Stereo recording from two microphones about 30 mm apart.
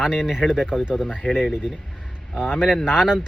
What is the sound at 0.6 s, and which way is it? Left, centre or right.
Speech, right.